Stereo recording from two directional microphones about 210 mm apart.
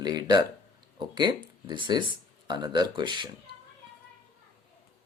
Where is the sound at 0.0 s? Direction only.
20° right (ahead or behind).